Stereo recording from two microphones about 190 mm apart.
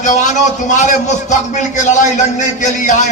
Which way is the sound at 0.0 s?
40° left (ahead or behind).